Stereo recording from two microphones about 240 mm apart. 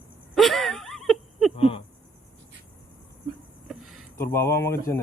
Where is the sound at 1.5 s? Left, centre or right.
Left.